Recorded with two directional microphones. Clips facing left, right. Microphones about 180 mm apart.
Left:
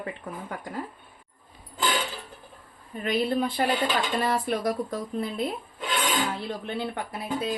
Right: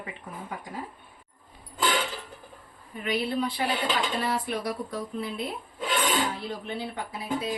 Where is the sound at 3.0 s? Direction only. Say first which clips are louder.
Left 3 dB; 50° left (ahead or behind).